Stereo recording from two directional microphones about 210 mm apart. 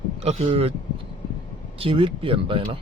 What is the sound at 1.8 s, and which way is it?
A man's voice, 25° right (ahead or behind).